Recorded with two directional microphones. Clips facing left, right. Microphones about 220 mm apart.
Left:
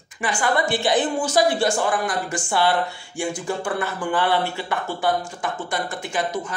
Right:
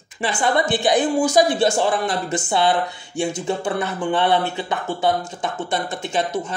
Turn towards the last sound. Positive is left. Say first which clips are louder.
# right 3 dB
turn(degrees=-25)  # may be behind; listen again after turning